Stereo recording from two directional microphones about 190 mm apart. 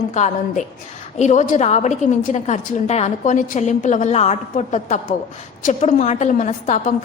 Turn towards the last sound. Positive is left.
turn(degrees=40)  # may be behind; listen again after turning